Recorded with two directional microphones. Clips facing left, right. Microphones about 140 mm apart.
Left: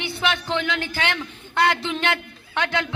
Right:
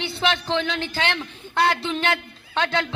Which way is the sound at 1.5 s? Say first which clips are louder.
Even; 15° left (ahead or behind).